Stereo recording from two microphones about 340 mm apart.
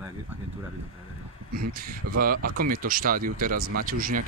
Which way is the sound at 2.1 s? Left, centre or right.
Right.